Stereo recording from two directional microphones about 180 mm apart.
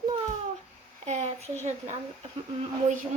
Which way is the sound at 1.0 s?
40° right (ahead or behind).